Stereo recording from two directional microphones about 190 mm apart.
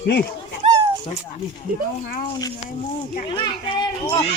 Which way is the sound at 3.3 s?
25° left (ahead or behind).